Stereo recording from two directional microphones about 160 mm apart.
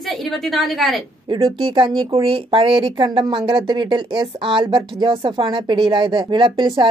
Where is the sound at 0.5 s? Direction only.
Centre (ahead or behind).